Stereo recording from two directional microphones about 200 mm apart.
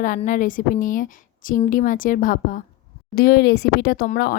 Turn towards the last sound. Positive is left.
turn(degrees=45)  # may be behind; listen again after turning